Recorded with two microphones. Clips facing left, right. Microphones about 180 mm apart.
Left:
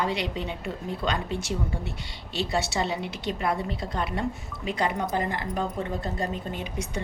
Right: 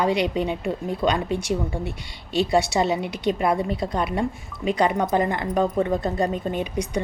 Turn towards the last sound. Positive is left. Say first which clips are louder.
# right 7 dB
turn(degrees=-15)  # may be behind; listen again after turning